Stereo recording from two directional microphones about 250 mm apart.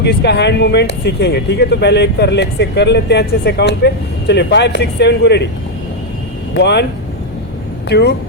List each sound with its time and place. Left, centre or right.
0.0 s speech: left
6.5 s speech: left
7.9 s speech: left